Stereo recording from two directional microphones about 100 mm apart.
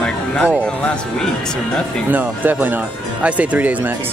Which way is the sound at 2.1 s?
20° right (ahead or behind).